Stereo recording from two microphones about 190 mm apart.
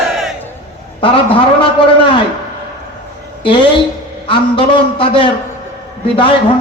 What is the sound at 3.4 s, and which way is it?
A man's voice, 25° left (ahead or behind).